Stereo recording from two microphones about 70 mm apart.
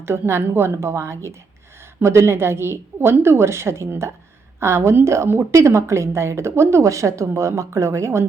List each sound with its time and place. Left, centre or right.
0.0 s a woman's voice: right